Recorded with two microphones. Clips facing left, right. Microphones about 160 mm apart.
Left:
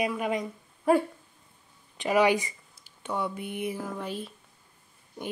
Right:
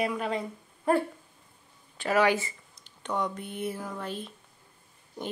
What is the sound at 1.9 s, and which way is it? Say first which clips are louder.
Speech: left 1 dB; 15° left (ahead or behind).